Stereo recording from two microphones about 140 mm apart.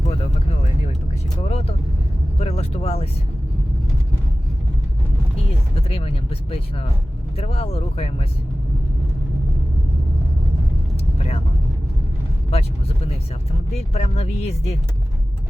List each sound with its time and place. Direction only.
0.0 s a sound: 50° left (ahead or behind)
1.4 s vehicle: 45° left (ahead or behind)
2.4 s speech: 50° left (ahead or behind)
5.7 s speech: 45° left (ahead or behind)
11.2 s vehicle: 45° left (ahead or behind)
12.5 s speech: 45° left (ahead or behind)